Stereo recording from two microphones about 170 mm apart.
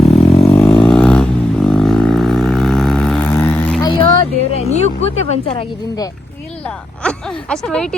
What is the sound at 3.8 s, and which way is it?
Vehicle, 30° left (ahead or behind).